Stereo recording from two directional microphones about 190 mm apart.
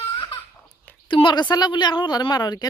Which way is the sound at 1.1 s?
25° left (ahead or behind).